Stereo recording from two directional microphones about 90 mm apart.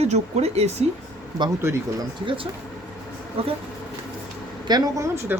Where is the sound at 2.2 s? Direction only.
70° right (ahead or behind).